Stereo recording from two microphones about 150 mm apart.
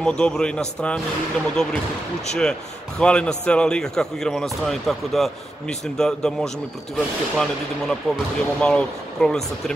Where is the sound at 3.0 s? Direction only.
5° left (ahead or behind).